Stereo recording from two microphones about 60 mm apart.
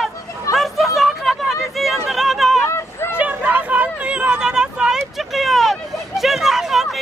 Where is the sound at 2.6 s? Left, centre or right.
Left.